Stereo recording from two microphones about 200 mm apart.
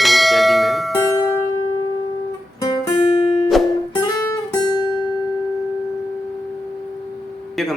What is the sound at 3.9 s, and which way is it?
Music, 20° left (ahead or behind).